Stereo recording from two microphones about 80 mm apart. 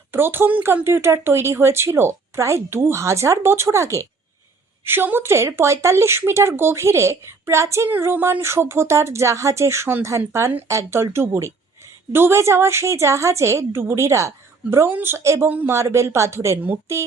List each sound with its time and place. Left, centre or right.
0.1 s speech: right
4.9 s speech: right
7.9 s speech: right
15.4 s speech: right
15.7 s speech: right